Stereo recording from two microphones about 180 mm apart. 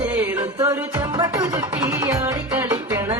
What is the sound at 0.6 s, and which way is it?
Music, 20° right (ahead or behind).